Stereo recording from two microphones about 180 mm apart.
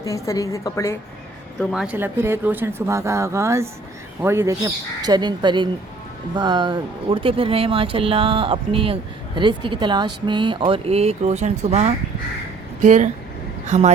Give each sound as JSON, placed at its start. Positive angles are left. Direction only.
{"t": 0.1, "sound": "a woman's voice", "side_deg": 15}
{"t": 1.5, "sound": "a woman's voice", "side_deg": -5}